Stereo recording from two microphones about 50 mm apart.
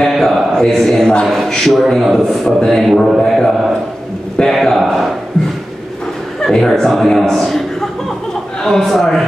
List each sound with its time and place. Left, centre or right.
0.1 s mantra: centre
0.6 s a man's voice: centre
6.4 s a man's voice: centre
8.6 s a man's voice: centre